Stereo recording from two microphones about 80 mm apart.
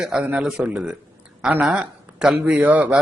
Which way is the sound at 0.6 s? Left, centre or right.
Centre.